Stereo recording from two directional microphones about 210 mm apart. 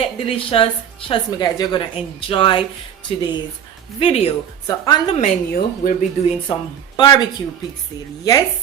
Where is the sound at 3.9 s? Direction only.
25° left (ahead or behind).